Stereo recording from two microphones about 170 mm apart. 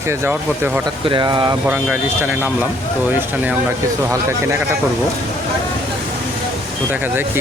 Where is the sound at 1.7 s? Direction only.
10° right (ahead or behind).